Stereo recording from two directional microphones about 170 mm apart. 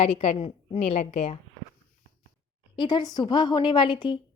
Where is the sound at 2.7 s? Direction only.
25° left (ahead or behind).